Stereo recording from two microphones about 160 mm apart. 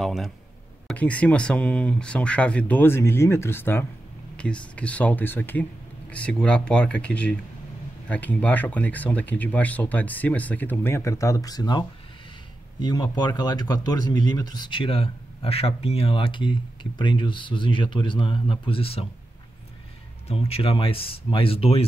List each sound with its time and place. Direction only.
0.0 s a man's voice: centre (ahead or behind); by 19.0 s 35° left (ahead or behind)
20.2 s a man's voice: 40° left (ahead or behind)